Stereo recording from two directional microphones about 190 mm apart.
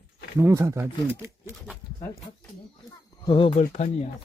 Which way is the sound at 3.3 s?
30° left (ahead or behind).